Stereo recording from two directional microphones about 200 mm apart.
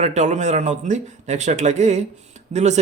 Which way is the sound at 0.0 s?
35° right (ahead or behind).